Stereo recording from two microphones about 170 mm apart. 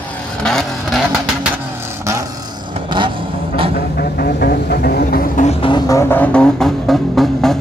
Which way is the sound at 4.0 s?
65° left (ahead or behind).